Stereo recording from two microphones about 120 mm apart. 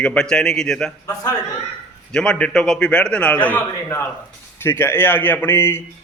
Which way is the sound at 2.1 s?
5° left (ahead or behind).